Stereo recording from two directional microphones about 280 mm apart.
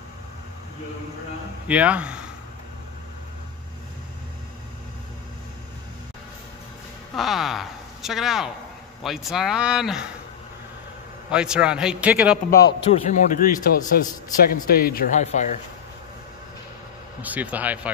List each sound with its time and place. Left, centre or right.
1.7 s speech: centre
7.2 s a man's voice: centre
11.2 s a man's voice: centre
12.4 s a man's voice: left
17.2 s a man's voice: centre